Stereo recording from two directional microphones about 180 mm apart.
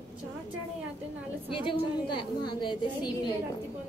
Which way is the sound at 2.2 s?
25° left (ahead or behind).